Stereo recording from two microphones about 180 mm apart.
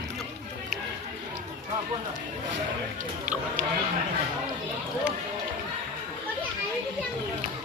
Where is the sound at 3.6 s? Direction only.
50° right (ahead or behind).